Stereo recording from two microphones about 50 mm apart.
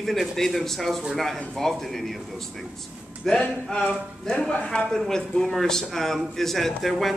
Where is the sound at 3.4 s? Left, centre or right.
Centre.